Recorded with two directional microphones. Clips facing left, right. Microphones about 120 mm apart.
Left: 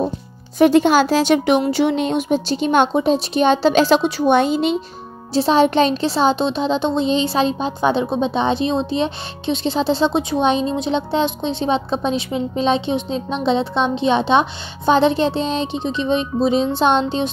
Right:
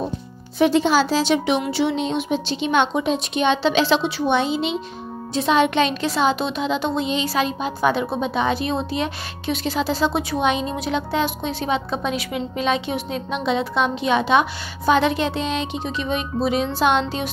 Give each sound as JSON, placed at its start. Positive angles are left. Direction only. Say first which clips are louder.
{"t": 0.6, "sound": "speech", "louder": "left 4 dB", "side_deg": 50}
{"t": 5.3, "sound": "speech", "louder": "left 4 dB", "side_deg": 35}